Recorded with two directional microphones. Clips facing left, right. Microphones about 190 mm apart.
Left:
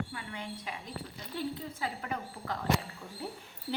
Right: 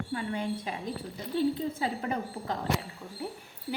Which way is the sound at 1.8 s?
25° right (ahead or behind).